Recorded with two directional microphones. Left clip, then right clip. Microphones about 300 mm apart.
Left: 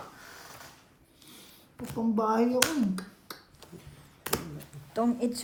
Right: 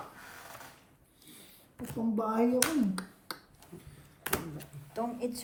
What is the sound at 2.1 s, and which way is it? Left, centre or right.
Speech, centre.